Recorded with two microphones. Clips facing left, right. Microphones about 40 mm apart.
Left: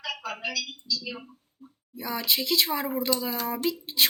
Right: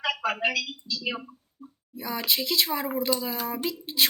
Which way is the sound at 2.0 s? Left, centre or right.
Centre.